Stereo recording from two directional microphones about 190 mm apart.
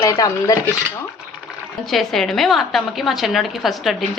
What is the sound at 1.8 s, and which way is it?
A woman's voice, centre (ahead or behind).